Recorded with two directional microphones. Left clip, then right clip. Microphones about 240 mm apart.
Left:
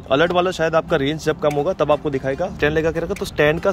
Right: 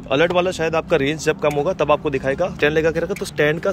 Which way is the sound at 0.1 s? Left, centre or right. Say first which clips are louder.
Even; centre.